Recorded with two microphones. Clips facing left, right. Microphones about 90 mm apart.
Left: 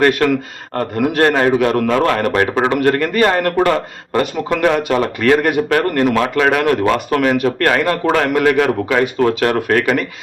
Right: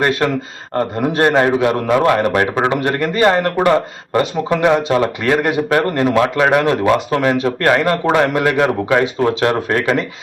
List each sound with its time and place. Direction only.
0.0 s a man's voice: 20° right (ahead or behind)
1.4 s a man's voice: 20° right (ahead or behind)